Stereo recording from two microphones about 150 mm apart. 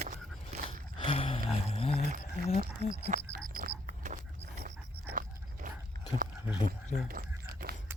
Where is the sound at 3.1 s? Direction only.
55° right (ahead or behind).